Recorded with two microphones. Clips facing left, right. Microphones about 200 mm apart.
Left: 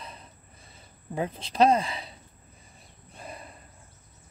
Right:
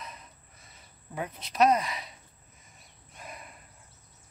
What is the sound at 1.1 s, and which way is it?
Speech, 30° left (ahead or behind).